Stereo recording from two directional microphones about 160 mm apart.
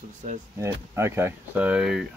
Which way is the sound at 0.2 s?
45° right (ahead or behind).